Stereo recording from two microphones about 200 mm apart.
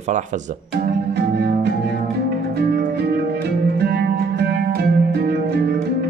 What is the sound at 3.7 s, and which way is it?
Music, 55° right (ahead or behind).